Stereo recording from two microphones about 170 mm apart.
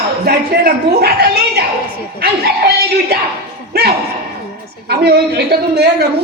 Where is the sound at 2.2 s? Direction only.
70° right (ahead or behind).